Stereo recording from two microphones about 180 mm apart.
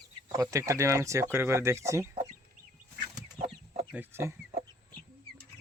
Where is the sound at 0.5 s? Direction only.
15° right (ahead or behind).